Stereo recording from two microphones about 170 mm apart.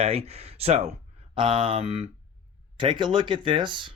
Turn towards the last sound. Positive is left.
turn(degrees=-30)  # may be behind; listen again after turning